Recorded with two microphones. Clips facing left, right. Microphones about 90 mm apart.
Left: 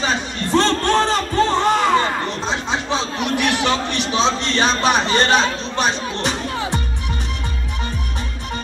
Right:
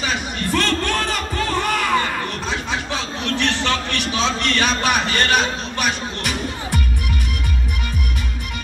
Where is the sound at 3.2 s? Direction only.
15° left (ahead or behind).